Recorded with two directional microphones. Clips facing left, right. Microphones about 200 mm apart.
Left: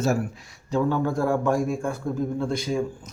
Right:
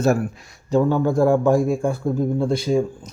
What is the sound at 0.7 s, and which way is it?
A man's voice, 40° right (ahead or behind).